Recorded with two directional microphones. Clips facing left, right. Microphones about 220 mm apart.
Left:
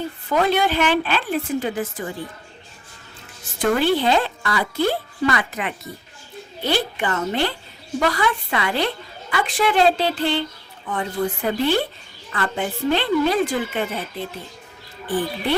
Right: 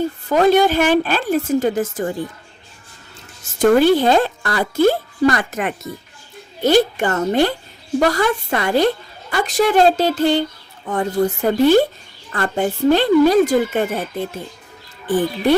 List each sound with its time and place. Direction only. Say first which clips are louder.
0.3 s a woman's voice: right 6 dB; 45° right (ahead or behind)
3.6 s a woman's voice: right 6 dB; 45° right (ahead or behind)